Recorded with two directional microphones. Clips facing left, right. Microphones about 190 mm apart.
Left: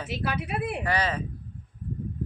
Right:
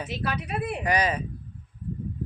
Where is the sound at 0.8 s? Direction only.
15° right (ahead or behind).